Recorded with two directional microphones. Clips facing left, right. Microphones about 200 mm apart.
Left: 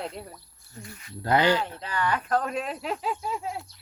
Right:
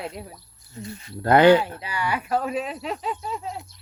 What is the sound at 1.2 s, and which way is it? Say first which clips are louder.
Speech: right 8 dB; 55° right (ahead or behind).